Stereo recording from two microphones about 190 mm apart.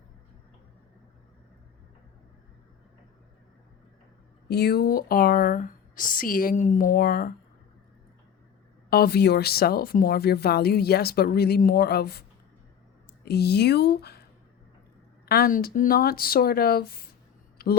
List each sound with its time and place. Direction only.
4.4 s speech: 55° left (ahead or behind)
8.9 s speech: 55° left (ahead or behind)
13.2 s speech: 60° left (ahead or behind)
15.3 s speech: 50° left (ahead or behind)
17.6 s a sound: 55° left (ahead or behind)